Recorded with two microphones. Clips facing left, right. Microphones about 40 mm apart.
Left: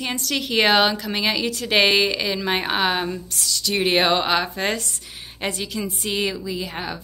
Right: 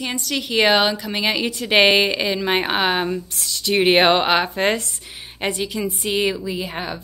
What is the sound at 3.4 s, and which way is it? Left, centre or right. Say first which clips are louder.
Speech: right 3 dB; right.